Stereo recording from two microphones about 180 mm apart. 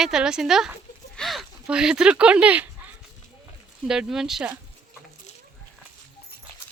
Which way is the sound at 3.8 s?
5° right (ahead or behind).